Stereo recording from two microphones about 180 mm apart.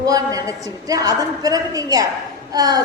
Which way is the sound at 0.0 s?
20° right (ahead or behind).